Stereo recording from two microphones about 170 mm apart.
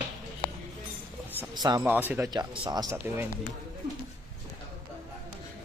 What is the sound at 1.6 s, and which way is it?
Speech, 25° right (ahead or behind).